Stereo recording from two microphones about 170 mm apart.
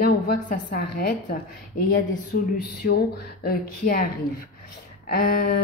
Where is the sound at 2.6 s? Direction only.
70° left (ahead or behind).